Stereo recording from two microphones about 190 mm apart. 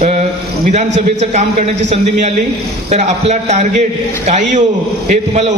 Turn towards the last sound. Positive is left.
turn(degrees=-35)  # may be behind; listen again after turning